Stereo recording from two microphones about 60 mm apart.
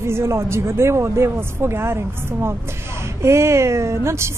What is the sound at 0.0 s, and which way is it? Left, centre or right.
A woman's voice, right.